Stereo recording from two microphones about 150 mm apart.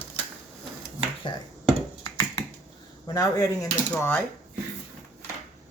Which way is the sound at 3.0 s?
25° left (ahead or behind).